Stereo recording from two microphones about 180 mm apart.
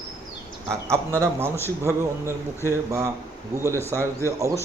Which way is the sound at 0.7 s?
15° right (ahead or behind).